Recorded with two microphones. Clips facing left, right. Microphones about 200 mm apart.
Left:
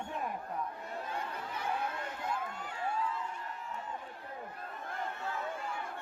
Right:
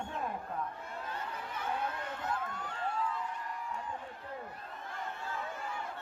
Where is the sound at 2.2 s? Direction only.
10° left (ahead or behind).